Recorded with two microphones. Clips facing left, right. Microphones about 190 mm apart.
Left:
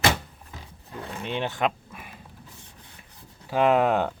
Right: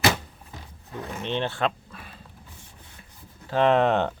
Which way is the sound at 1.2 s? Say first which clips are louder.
Even; 10° left (ahead or behind).